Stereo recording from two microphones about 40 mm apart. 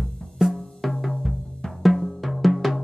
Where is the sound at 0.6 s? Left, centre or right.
Centre.